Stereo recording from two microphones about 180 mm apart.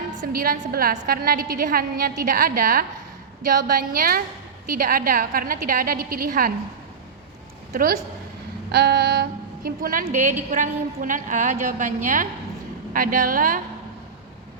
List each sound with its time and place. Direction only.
0.3 s a woman's voice: 55° right (ahead or behind)
7.7 s a woman's voice: 55° right (ahead or behind)
8.7 s a sound: 60° right (ahead or behind)
9.6 s a woman's voice: 50° right (ahead or behind)